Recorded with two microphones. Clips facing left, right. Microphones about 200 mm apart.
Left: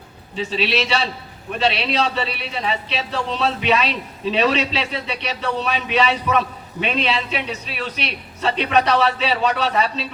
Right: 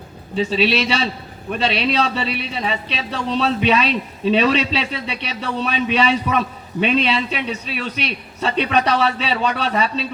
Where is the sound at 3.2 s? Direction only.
40° right (ahead or behind).